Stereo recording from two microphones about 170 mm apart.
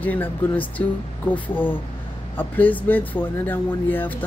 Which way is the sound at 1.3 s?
10° left (ahead or behind).